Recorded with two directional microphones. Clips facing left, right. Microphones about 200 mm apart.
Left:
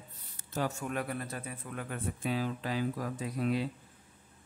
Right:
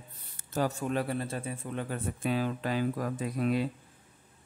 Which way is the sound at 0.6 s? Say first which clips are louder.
Right 4 dB; 30° right (ahead or behind).